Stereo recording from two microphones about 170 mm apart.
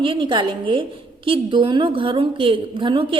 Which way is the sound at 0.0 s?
30° right (ahead or behind).